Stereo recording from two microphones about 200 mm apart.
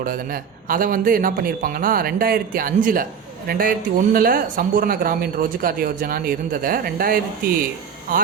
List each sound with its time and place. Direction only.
0.0 s a man's voice: 45° right (ahead or behind)